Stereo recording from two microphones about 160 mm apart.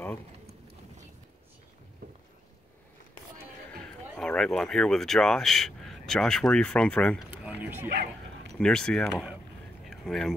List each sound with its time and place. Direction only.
2.0 s clip-clop: 70° right (ahead or behind)
4.2 s speech: 5° left (ahead or behind)
7.2 s a sound: 10° right (ahead or behind)
7.9 s bow-wow: 80° right
8.5 s speech: 5° left (ahead or behind)
9.8 s a sound: centre (ahead or behind)